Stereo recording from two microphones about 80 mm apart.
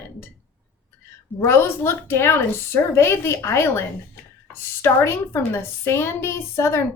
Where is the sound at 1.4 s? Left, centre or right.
Left.